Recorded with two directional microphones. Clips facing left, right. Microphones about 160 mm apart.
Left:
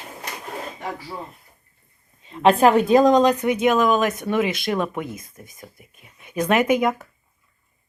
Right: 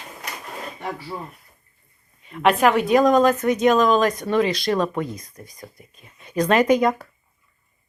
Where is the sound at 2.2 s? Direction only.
25° left (ahead or behind); by 6.9 s 10° left (ahead or behind).